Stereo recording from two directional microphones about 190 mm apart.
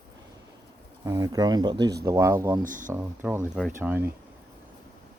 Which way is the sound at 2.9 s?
10° right (ahead or behind).